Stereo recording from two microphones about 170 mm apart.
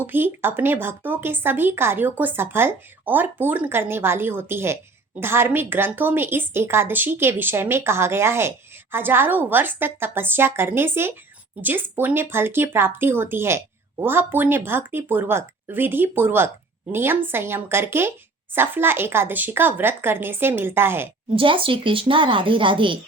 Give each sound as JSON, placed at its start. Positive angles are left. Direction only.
{"t": 0.0, "sound": "a woman's voice", "side_deg": -10}
{"t": 21.3, "sound": "a woman's voice", "side_deg": -30}